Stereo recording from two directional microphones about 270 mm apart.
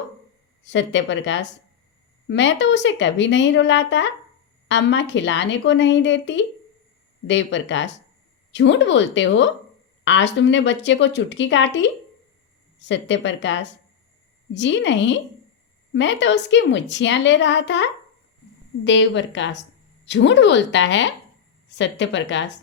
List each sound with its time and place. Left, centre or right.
0.6 s a woman's voice: left
18.9 s a woman's voice: left